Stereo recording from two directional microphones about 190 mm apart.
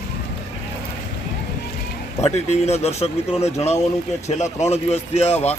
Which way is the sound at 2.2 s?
35° left (ahead or behind).